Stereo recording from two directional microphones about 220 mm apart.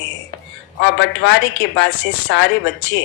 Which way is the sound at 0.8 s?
55° left (ahead or behind).